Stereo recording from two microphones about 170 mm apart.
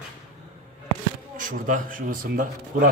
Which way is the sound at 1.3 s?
50° right (ahead or behind).